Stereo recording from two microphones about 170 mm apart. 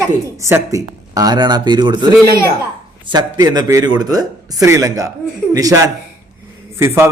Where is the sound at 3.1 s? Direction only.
25° right (ahead or behind).